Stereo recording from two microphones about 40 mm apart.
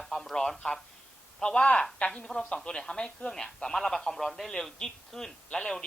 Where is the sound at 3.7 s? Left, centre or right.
Centre.